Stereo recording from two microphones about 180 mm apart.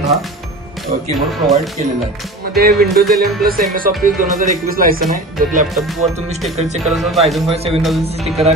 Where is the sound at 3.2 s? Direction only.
55° right (ahead or behind).